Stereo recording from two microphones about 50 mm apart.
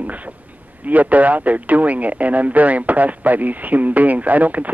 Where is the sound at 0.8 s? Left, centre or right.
Right.